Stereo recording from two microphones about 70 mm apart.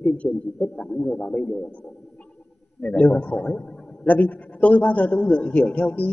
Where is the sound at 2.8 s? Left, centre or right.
Centre.